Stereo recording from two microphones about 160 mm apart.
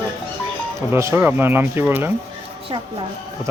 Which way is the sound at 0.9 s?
15° right (ahead or behind).